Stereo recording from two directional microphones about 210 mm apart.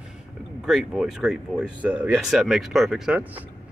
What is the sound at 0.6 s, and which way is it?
Speech, centre (ahead or behind).